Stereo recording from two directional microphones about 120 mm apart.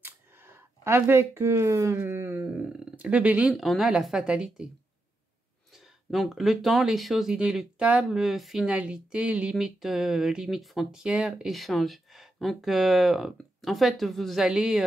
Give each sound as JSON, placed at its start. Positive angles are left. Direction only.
{"t": 0.0, "sound": "speech", "side_deg": -20}
{"t": 3.5, "sound": "speech", "side_deg": 0}
{"t": 6.0, "sound": "speech", "side_deg": 0}